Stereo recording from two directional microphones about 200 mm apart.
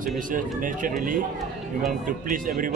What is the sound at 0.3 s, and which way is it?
Speech, 40° right (ahead or behind).